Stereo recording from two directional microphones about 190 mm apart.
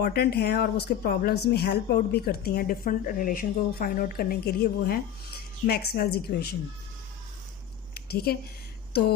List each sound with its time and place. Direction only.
0.0 s speech: 55° left (ahead or behind)
7.9 s a sound: 55° left (ahead or behind)
8.9 s speech: 60° left (ahead or behind)